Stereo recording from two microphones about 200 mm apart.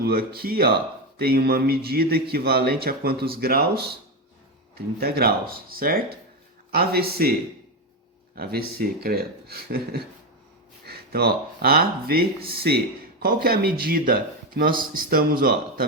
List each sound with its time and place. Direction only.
0.0 s speech: 50° right (ahead or behind)
4.9 s speech: 50° right (ahead or behind)
8.4 s speech: 50° right (ahead or behind)